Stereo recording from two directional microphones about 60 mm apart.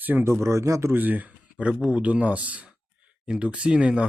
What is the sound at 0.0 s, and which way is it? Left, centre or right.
Speech, right.